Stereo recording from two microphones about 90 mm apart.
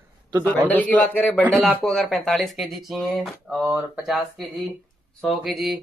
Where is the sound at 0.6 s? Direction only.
15° left (ahead or behind).